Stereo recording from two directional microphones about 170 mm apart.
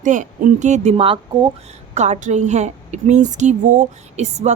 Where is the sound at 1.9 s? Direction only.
40° right (ahead or behind).